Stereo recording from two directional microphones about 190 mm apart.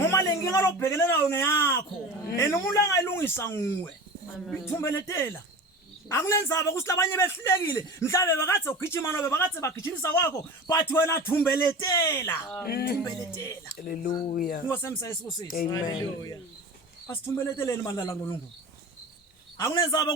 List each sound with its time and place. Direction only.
0.1 s a man's voice: 15° left (ahead or behind)
12.6 s music: 55° left (ahead or behind)
13.1 s a man's voice: 15° left (ahead or behind)
13.8 s music: 50° left (ahead or behind)
14.1 s speech: 25° left (ahead or behind)
14.3 s music: 50° left (ahead or behind)
14.7 s a man's voice: 15° left (ahead or behind)
19.5 s speech: 20° left (ahead or behind)